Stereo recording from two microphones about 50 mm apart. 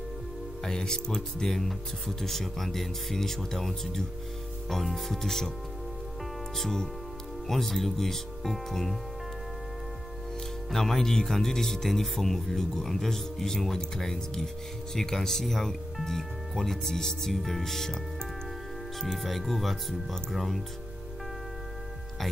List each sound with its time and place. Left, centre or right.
0.7 s speech: centre
6.5 s speech: centre
10.7 s speech: centre
18.9 s speech: centre